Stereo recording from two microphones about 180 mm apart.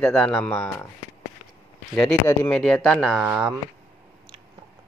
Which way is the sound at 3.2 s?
10° right (ahead or behind).